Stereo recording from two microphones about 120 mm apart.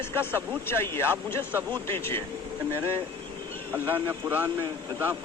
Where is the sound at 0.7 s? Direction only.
20° left (ahead or behind).